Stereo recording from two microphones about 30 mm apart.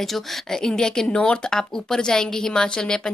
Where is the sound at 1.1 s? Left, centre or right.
Left.